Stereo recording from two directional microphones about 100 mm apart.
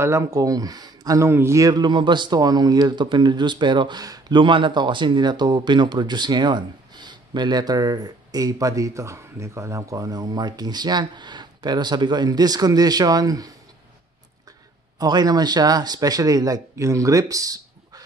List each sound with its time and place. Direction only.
0.0 s speech: 30° right (ahead or behind)
4.4 s speech: 55° right (ahead or behind)
15.0 s speech: 40° right (ahead or behind)